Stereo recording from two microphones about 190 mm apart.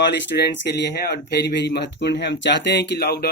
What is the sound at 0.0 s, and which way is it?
Speech, 65° left (ahead or behind).